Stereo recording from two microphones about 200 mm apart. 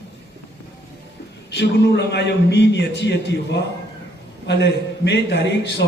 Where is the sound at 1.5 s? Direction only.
60° left (ahead or behind).